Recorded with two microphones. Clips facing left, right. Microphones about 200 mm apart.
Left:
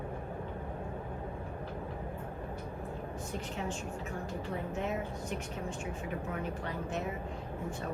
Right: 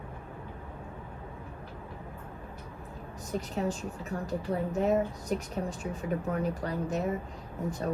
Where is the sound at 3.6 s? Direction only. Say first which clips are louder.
Right 7 dB; 35° right (ahead or behind).